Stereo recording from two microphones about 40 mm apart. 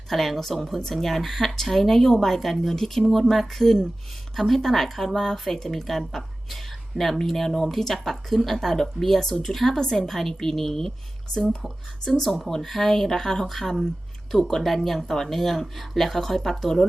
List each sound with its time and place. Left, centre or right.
0.1 s speech: centre
12.0 s speech: centre